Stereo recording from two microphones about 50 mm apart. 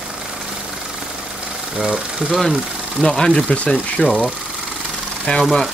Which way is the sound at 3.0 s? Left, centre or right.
Centre.